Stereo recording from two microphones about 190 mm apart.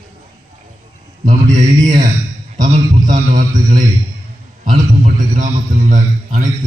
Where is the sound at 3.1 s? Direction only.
40° right (ahead or behind).